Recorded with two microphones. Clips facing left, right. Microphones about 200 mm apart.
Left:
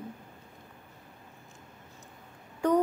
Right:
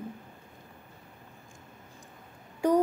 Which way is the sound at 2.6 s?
10° right (ahead or behind).